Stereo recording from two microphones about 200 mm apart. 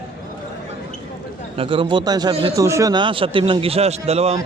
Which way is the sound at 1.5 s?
25° right (ahead or behind).